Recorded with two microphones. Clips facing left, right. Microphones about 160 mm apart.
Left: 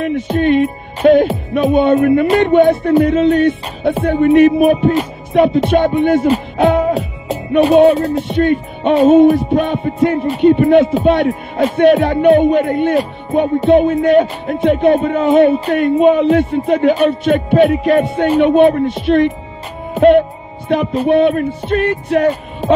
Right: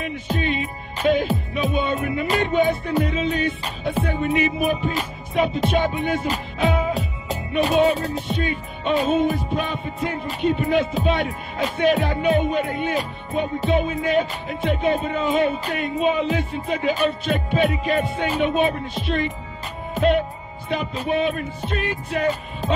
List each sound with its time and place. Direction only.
0.0 s music: 60° left (ahead or behind)